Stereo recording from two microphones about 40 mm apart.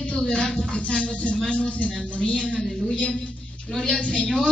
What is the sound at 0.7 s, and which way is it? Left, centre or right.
Music, left.